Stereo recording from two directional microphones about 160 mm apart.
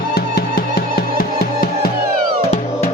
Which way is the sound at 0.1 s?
75° left (ahead or behind).